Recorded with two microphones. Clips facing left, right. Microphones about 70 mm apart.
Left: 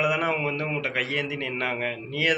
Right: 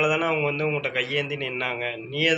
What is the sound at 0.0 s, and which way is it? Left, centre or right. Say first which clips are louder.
A man's voice: right 2 dB; left.